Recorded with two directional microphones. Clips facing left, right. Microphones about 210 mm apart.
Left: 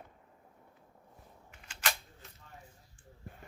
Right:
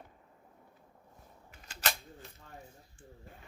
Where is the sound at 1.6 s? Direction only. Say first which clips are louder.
Right 1 dB; 40° right (ahead or behind).